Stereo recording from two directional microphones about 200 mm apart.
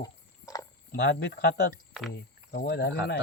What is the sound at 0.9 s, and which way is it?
Speech, 55° left (ahead or behind).